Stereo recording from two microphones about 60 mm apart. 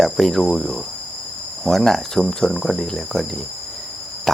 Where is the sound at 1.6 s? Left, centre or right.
Centre.